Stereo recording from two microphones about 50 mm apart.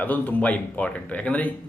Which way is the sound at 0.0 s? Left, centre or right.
Left.